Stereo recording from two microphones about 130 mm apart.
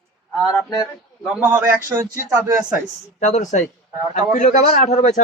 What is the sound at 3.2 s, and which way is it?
A man's voice, 65° left (ahead or behind).